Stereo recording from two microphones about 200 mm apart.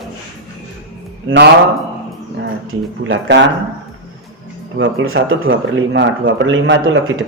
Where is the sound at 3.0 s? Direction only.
65° right (ahead or behind).